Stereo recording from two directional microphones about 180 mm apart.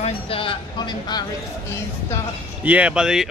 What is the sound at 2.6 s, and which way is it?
Speech, 10° right (ahead or behind).